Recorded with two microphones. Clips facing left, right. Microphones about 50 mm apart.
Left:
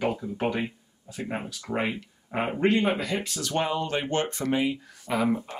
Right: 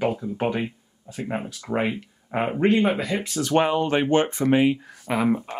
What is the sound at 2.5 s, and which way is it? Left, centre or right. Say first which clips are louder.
Speech: right 3 dB; centre.